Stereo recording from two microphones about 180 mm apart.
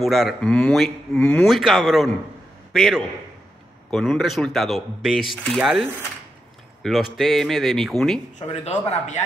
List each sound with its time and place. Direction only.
0.0 s a man's voice: centre (ahead or behind)
8.4 s a man's voice: 40° left (ahead or behind)